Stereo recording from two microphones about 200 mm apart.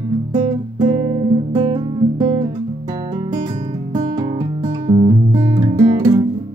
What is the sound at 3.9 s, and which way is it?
Music, 25° right (ahead or behind).